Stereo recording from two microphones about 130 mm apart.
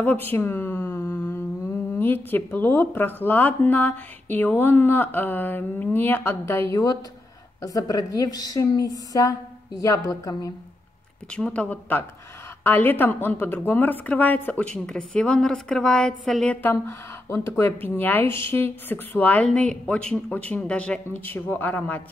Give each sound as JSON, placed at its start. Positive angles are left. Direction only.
{"t": 0.0, "sound": "a woman's voice", "side_deg": 15}
{"t": 11.2, "sound": "speech", "side_deg": 10}
{"t": 16.6, "sound": "speech", "side_deg": 20}